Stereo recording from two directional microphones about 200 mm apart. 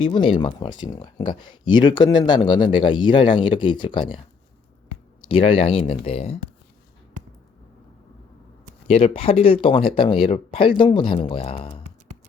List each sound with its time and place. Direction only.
0.0 s speech: 25° left (ahead or behind)
5.2 s speech: 25° left (ahead or behind)
8.9 s speech: 30° left (ahead or behind)